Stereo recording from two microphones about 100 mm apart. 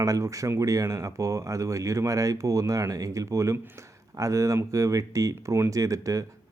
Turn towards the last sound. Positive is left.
turn(degrees=-35)  # may be behind; listen again after turning